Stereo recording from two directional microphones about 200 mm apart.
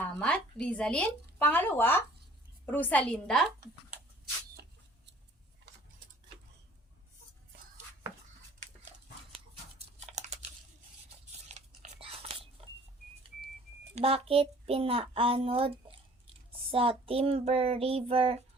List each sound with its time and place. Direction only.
0.0 s a woman's voice: 5° left (ahead or behind)
9.7 s computer keyboard: 35° right (ahead or behind)
11.3 s biting: 35° right (ahead or behind)
13.9 s a child's voice: 30° right (ahead or behind)
16.7 s child singing: 30° right (ahead or behind)